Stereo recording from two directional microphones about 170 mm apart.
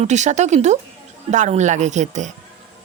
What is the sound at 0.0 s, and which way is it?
Speech, 45° right (ahead or behind).